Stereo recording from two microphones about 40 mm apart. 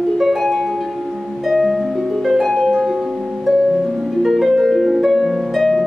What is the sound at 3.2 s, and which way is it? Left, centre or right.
Harp, centre.